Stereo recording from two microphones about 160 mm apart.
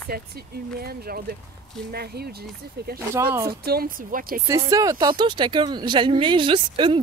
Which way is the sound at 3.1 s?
15° right (ahead or behind).